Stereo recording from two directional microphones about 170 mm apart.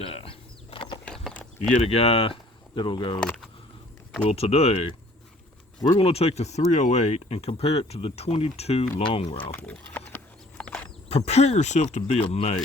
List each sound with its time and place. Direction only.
0.0 s a sound: 35° left (ahead or behind)
1.0 s a sound: 5° left (ahead or behind)
1.8 s speech: 35° left (ahead or behind)
3.2 s speech: centre (ahead or behind)
4.3 s speech: 35° left (ahead or behind)
6.0 s speech: 35° left (ahead or behind)
9.4 s speech: 10° left (ahead or behind)
10.6 s a sound: 5° left (ahead or behind)
11.1 s speech: 40° left (ahead or behind)